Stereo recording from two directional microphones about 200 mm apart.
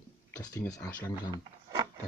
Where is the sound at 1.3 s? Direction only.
20° right (ahead or behind).